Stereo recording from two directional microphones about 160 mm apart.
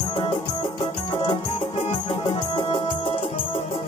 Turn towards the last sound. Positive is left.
turn(degrees=35)  # may be behind; listen again after turning